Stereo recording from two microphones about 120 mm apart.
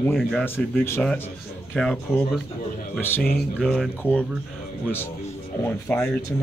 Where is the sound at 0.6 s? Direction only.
5° left (ahead or behind).